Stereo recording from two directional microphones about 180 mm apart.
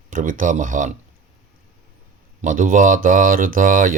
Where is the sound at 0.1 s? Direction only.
45° right (ahead or behind).